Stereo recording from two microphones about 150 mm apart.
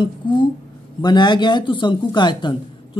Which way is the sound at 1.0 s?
30° left (ahead or behind).